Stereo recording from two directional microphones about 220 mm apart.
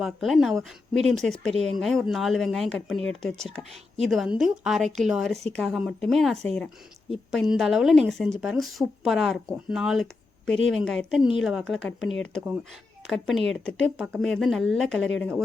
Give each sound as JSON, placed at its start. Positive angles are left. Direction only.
{"t": 0.0, "sound": "speech", "side_deg": 0}
{"t": 12.0, "sound": "speech", "side_deg": 60}
{"t": 13.1, "sound": "speech", "side_deg": 0}